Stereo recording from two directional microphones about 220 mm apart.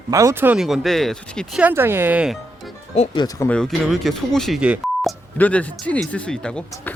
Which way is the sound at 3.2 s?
10° left (ahead or behind).